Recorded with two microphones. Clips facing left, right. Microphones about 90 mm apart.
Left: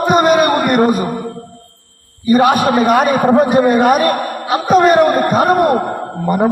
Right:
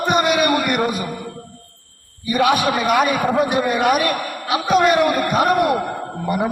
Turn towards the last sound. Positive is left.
turn(degrees=40)  # may be behind; listen again after turning